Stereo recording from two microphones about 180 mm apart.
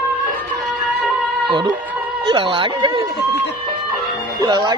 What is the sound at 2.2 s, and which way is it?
Speech, 25° right (ahead or behind).